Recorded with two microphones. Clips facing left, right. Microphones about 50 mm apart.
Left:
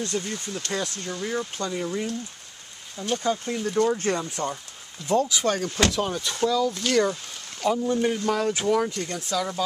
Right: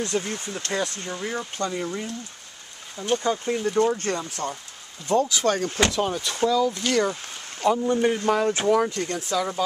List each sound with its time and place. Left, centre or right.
0.2 s speech: right
0.7 s speech: centre
3.0 s speech: centre
3.9 s speech: centre